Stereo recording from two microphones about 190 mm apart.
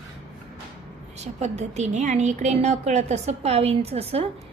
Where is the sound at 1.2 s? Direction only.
35° right (ahead or behind).